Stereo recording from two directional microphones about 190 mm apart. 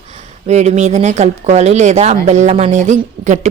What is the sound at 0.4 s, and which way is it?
Speech, 35° right (ahead or behind).